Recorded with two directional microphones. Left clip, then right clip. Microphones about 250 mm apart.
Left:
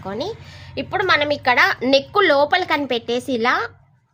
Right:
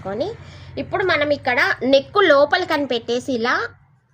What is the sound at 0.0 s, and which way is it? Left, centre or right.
A woman's voice, left.